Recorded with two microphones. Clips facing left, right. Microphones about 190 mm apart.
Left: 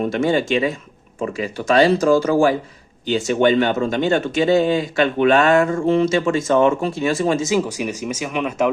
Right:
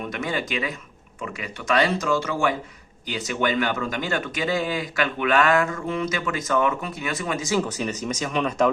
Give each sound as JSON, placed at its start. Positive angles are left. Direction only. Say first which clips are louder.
{"t": 0.0, "sound": "speech", "louder": "left 10 dB", "side_deg": 30}
{"t": 7.5, "sound": "speech", "louder": "left 4 dB", "side_deg": 10}